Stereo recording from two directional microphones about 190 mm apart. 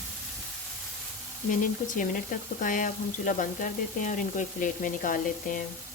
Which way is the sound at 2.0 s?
45° left (ahead or behind).